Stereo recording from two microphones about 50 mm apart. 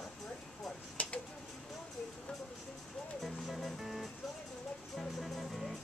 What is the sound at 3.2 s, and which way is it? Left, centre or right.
Music, centre.